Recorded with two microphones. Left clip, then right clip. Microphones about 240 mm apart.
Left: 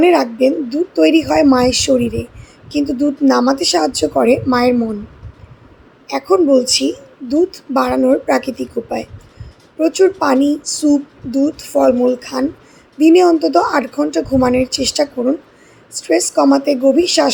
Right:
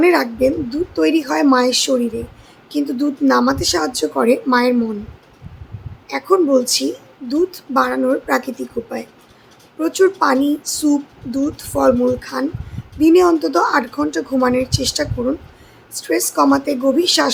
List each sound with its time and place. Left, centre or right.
0.0 s a woman's voice: centre
6.1 s a woman's voice: centre